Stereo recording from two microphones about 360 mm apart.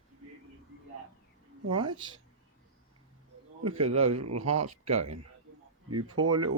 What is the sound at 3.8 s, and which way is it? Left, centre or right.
Speech, right.